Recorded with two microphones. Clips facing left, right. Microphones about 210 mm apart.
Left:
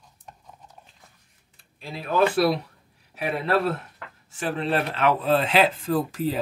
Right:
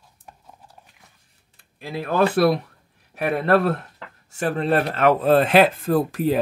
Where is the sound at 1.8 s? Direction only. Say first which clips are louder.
Right 2 dB; 55° right (ahead or behind).